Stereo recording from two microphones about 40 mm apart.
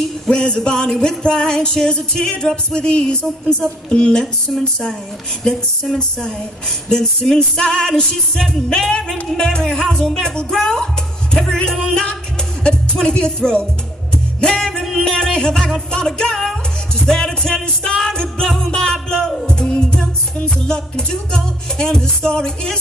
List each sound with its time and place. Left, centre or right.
0.3 s music: left
4.5 s a sound: centre
5.4 s music: centre
14.5 s music: centre
15.0 s music: left